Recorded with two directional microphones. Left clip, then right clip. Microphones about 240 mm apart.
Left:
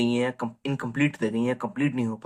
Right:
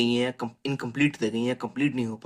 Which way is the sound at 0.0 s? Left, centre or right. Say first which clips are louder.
Even; right.